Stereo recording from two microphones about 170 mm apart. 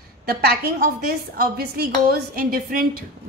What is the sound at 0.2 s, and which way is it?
A woman's voice, 70° right (ahead or behind).